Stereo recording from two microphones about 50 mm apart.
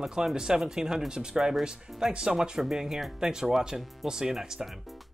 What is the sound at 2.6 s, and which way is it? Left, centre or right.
Speech, centre.